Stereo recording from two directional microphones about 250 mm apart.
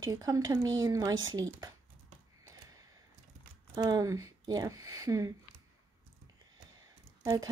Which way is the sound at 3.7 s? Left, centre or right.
Centre.